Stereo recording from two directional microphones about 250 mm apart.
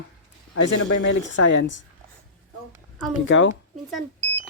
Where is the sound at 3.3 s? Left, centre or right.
Left.